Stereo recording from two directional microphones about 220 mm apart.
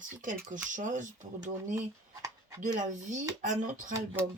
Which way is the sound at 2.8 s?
35° right (ahead or behind).